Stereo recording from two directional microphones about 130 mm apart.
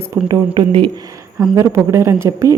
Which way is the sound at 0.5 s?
35° right (ahead or behind).